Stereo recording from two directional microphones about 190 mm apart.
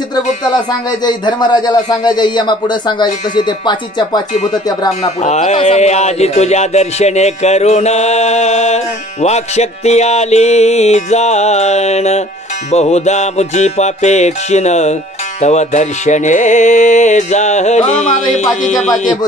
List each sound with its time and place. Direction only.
0.1 s speech: 20° left (ahead or behind)
5.2 s speech: 35° left (ahead or behind)